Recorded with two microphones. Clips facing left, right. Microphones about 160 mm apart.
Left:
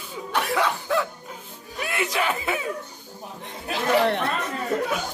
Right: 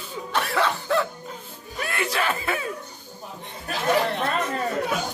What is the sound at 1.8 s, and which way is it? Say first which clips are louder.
Speech: left 1 dB; 15° left (ahead or behind).